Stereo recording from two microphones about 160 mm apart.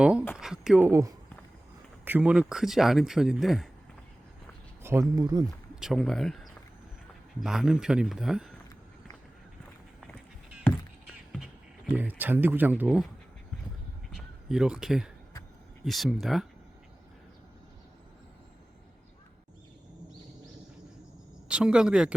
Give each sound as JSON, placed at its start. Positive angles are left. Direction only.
{"t": 0.0, "sound": "a sound", "side_deg": -5}
{"t": 0.9, "sound": "speech", "side_deg": -20}
{"t": 4.8, "sound": "speech", "side_deg": -15}
{"t": 5.8, "sound": "speech", "side_deg": 0}
{"t": 11.0, "sound": "music", "side_deg": -5}
{"t": 11.9, "sound": "speech", "side_deg": -10}
{"t": 14.1, "sound": "a sound", "side_deg": -5}
{"t": 15.8, "sound": "speech", "side_deg": 0}
{"t": 21.4, "sound": "speech", "side_deg": -5}